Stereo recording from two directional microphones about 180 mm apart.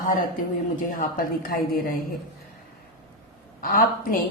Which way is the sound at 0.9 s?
50° left (ahead or behind).